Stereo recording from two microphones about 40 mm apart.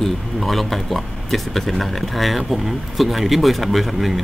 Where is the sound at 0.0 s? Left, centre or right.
Centre.